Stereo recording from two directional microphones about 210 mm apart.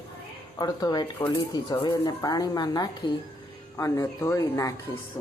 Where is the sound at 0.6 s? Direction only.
20° left (ahead or behind).